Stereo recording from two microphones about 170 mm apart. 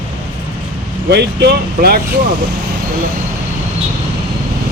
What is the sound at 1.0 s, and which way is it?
Speech, 80° right.